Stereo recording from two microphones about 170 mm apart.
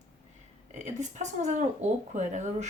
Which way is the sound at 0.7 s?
45° right (ahead or behind).